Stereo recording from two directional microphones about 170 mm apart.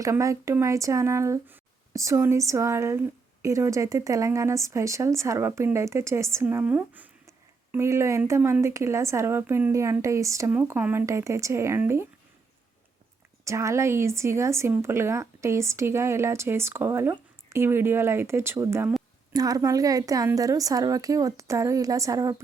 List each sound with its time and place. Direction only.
0.0 s speech: 20° right (ahead or behind)
13.4 s a woman's voice: 15° right (ahead or behind)